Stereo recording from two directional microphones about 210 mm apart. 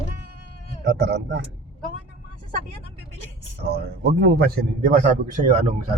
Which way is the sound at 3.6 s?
50° right (ahead or behind).